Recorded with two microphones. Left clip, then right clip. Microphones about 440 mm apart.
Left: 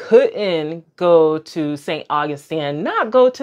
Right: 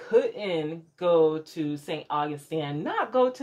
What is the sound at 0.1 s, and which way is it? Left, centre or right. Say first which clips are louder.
Speech: left 11 dB; left.